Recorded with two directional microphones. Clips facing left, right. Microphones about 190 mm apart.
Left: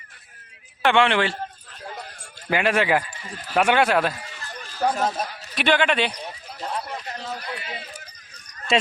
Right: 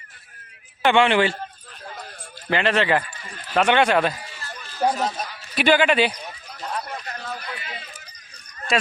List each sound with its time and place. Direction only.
0.8 s speech: centre (ahead or behind)
2.5 s speech: 10° left (ahead or behind)
4.8 s speech: 10° right (ahead or behind)
5.1 s a man's voice: 50° left (ahead or behind)
5.5 s speech: 5° right (ahead or behind)
6.1 s clip-clop: 30° left (ahead or behind)
7.4 s speech: 25° left (ahead or behind)